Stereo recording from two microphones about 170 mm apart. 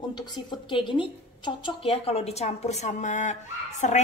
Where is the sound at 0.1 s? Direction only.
25° left (ahead or behind).